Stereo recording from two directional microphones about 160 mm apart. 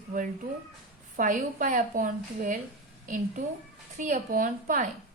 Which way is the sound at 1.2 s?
55° right (ahead or behind).